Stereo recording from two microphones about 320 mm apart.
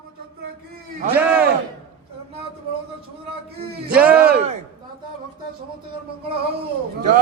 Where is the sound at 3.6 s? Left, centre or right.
Right.